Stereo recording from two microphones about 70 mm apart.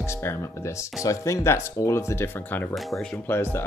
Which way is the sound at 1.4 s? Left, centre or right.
Left.